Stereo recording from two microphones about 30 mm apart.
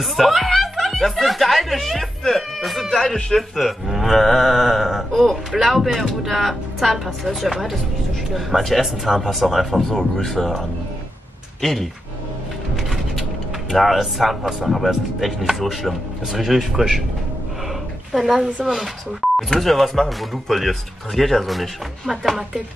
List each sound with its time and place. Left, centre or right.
0.0 s speech: centre
2.9 s speech: left
3.3 s speech: centre
5.1 s speech: centre
7.4 s speech: centre
11.6 s speech: centre
12.7 s a sound: centre
13.7 s speech: centre
18.1 s speech: centre
19.5 s speech: centre